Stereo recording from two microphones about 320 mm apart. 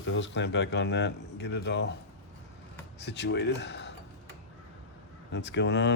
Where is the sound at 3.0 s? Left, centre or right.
Left.